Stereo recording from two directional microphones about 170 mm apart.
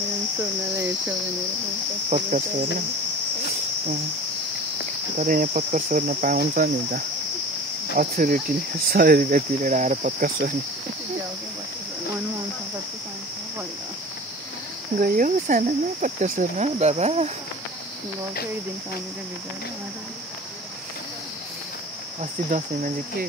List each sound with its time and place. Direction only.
2.0 s cricket: 45° right (ahead or behind)
5.2 s cricket: 50° right (ahead or behind)
8.0 s cricket: 55° right (ahead or behind)
15.0 s cricket: 55° right (ahead or behind); by 17.3 s 40° right (ahead or behind)
22.2 s cricket: 45° right (ahead or behind)